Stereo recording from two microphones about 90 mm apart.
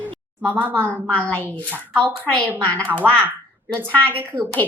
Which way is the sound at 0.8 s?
20° left (ahead or behind).